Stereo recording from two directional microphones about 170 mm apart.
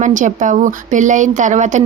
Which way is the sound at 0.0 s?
50° right (ahead or behind).